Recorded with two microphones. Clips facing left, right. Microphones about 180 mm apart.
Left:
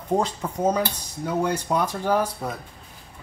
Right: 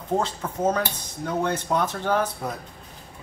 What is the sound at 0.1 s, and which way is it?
Speech, 15° left (ahead or behind).